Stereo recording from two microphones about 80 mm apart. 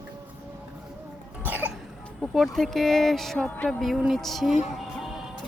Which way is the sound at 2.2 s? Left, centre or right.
Centre.